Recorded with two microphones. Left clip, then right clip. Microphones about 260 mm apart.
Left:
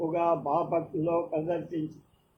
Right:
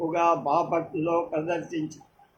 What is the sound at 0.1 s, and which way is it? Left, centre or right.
Speech, right.